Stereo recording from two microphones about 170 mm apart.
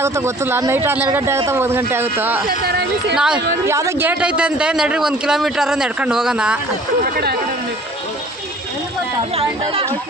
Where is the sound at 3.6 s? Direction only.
15° right (ahead or behind).